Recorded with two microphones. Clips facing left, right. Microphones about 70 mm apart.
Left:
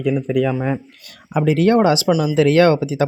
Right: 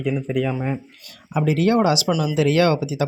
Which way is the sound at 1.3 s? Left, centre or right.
Left.